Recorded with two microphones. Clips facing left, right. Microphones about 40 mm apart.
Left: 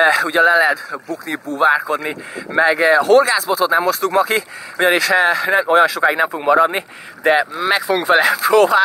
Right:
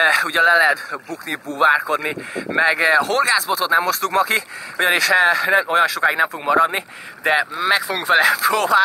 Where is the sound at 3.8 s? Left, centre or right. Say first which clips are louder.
Left 2 dB; centre.